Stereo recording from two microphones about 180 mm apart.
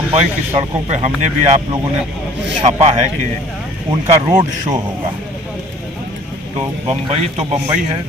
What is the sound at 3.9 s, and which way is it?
Speech, 25° right (ahead or behind).